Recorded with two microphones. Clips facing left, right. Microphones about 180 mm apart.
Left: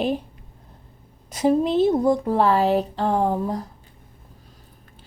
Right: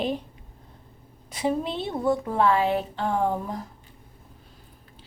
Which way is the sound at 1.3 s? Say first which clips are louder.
Left 8 dB; 40° left (ahead or behind).